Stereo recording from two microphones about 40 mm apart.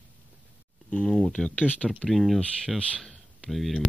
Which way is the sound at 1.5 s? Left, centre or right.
Left.